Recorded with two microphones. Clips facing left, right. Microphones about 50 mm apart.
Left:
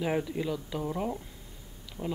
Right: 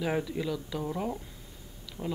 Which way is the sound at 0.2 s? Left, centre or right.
Centre.